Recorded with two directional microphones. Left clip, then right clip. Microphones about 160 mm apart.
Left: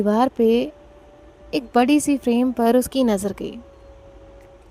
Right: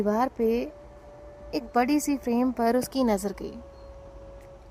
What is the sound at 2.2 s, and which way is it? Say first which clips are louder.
Speech: left 6 dB; 90° left.